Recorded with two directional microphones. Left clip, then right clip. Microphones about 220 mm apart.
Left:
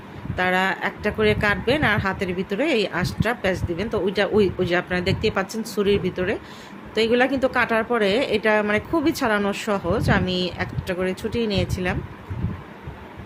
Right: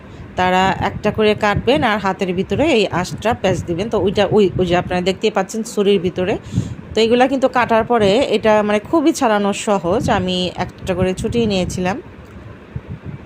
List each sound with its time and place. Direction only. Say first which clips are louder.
0.3 s speech: right 6 dB; 25° right (ahead or behind)